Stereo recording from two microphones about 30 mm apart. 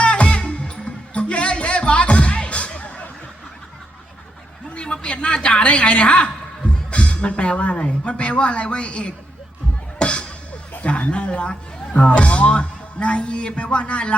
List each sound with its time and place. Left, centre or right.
0.0 s music: left
4.7 s a woman's voice: left
10.0 s music: left
10.8 s speech: left